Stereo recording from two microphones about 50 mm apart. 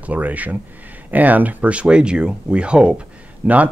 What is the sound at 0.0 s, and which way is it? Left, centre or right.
Speech, right.